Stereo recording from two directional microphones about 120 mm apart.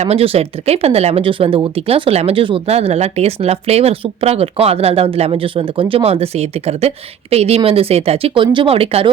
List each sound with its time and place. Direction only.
0.0 s speech: 55° right (ahead or behind)